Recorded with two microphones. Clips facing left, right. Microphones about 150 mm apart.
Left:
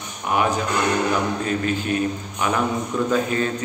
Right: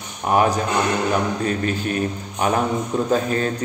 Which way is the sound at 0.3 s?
35° right (ahead or behind).